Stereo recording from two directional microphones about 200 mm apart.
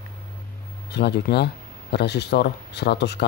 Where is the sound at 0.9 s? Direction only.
55° left (ahead or behind).